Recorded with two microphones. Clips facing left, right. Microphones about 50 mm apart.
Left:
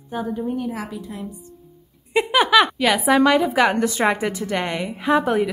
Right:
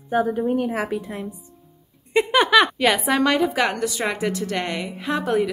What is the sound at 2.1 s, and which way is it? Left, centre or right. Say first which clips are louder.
A woman's voice: even; centre.